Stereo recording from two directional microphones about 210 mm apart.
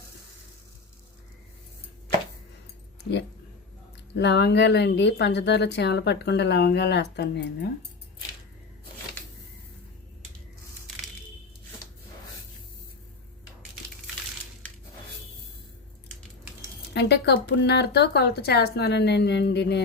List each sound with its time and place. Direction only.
4.1 s speech: 55° left (ahead or behind)
16.9 s speech: 55° left (ahead or behind)